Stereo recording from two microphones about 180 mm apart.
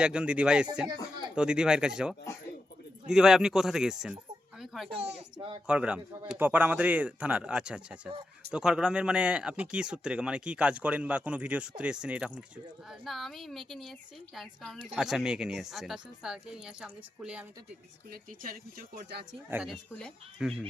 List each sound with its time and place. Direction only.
0.0 s speech: 5° right (ahead or behind)
4.6 s a sound: centre (ahead or behind)
4.9 s speech: 35° right (ahead or behind)
5.6 s a man's voice: 5° right (ahead or behind)
18.1 s speech: 55° right (ahead or behind)
19.5 s speech: 5° right (ahead or behind)